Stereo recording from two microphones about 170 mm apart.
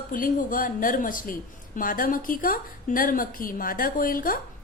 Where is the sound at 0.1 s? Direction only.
55° left (ahead or behind).